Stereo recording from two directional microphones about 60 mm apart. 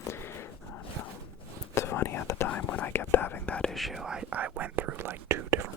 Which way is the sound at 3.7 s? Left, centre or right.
Centre.